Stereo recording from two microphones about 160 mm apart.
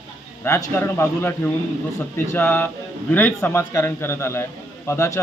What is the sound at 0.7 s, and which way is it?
Speech, 15° left (ahead or behind).